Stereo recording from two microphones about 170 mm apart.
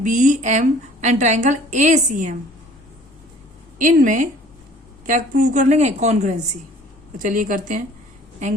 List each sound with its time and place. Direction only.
0.0 s a woman's voice: 50° right (ahead or behind)
3.8 s a woman's voice: 50° right (ahead or behind)